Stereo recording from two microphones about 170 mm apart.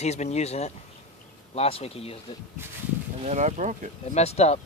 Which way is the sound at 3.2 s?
40° right (ahead or behind).